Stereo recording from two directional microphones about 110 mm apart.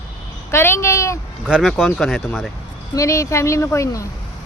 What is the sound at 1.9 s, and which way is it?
Speech, 5° left (ahead or behind).